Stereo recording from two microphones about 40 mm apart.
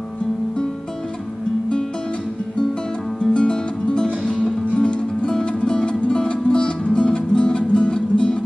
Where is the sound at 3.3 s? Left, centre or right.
Left.